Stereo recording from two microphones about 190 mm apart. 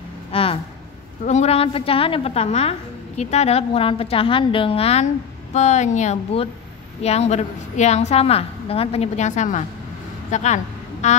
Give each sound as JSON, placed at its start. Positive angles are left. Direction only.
{"t": 0.3, "sound": "a woman's voice", "side_deg": 30}